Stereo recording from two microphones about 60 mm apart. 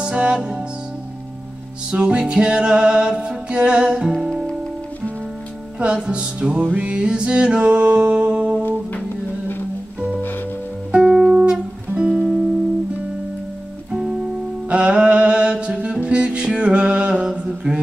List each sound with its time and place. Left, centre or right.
0.0 s music: centre
1.9 s music: centre
6.0 s music: centre
6.7 s music: right
7.0 s music: centre
10.9 s music: centre
14.7 s music: centre
17.2 s mantra: centre